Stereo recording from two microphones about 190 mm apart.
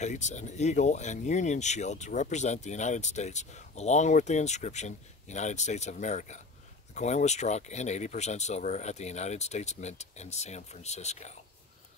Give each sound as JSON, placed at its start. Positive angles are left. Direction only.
{"t": 0.0, "sound": "speech", "side_deg": 40}